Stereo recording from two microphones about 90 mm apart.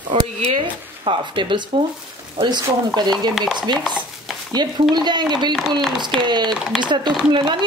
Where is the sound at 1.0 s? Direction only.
70° right (ahead or behind).